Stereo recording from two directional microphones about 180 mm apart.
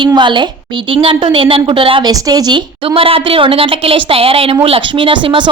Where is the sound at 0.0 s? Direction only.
25° right (ahead or behind).